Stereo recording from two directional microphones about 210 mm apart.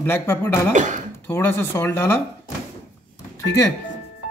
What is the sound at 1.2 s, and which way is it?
A man's voice, 10° left (ahead or behind).